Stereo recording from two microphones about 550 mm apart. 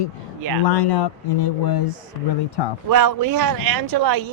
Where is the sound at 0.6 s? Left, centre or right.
Left.